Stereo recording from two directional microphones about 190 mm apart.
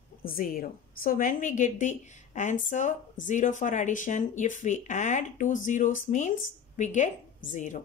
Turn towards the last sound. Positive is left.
turn(degrees=40)  # may be behind; listen again after turning